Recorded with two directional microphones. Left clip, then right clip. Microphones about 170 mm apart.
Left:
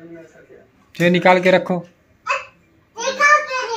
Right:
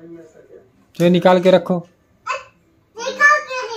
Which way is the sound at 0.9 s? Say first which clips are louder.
Even; 40° right (ahead or behind).